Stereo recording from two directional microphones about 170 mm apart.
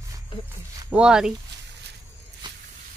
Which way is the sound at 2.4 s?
25° right (ahead or behind).